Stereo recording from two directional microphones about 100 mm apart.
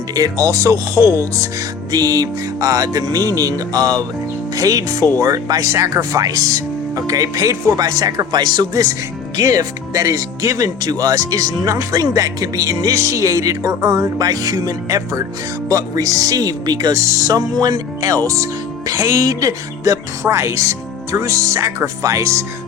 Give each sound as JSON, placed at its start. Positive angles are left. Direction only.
{"t": 0.1, "sound": "speech", "side_deg": -35}